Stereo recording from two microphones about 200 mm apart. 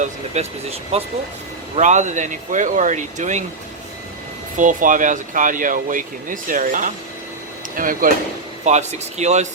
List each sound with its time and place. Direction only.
0.0 s speech: 30° right (ahead or behind)
4.5 s speech: 40° right (ahead or behind)